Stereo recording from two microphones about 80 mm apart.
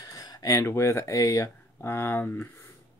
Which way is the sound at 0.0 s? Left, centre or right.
Left.